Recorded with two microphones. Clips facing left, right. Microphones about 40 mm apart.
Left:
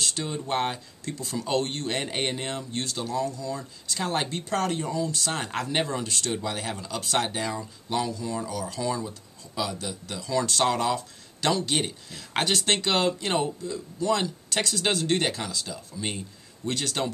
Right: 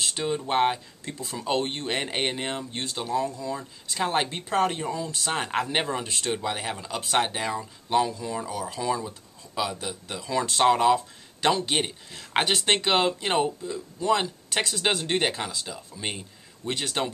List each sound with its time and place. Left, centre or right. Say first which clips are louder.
0.0 s speech: right 3 dB; centre